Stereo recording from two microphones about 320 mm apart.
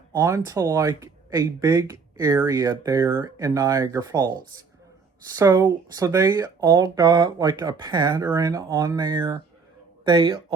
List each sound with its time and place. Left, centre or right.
0.1 s speech: centre